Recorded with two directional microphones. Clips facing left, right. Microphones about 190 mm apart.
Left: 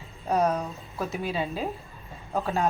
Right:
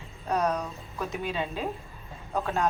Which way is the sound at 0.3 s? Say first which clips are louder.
Left 3 dB; 10° left (ahead or behind).